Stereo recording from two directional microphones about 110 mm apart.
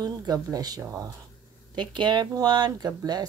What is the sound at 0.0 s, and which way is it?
Speech, 35° right (ahead or behind).